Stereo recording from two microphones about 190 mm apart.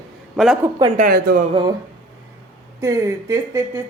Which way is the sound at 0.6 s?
20° right (ahead or behind).